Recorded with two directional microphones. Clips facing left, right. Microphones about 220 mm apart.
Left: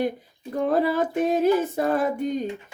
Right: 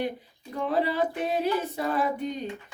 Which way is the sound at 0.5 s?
45° left (ahead or behind).